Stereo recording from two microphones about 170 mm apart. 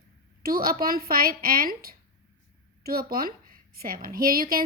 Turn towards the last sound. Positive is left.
turn(degrees=-55)  # may be behind; listen again after turning